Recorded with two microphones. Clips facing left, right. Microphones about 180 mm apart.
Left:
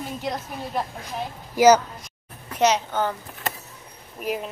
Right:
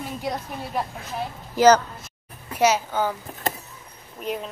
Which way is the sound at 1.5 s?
10° left (ahead or behind).